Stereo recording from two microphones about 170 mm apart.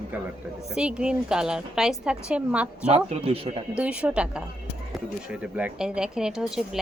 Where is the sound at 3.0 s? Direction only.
35° right (ahead or behind).